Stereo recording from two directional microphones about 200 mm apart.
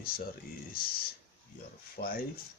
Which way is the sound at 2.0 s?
45° left (ahead or behind).